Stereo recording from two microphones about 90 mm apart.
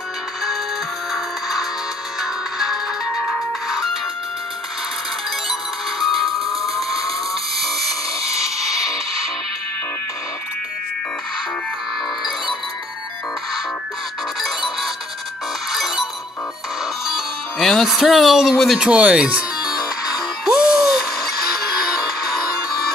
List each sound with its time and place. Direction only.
1.1 s music: centre (ahead or behind)
5.5 s music: centre (ahead or behind)
7.6 s a sound: centre (ahead or behind)
14.4 s music: centre (ahead or behind)
17.0 s speech: centre (ahead or behind)
18.9 s speech: 10° right (ahead or behind)
19.6 s music: 45° left (ahead or behind)
20.4 s music: 10° right (ahead or behind)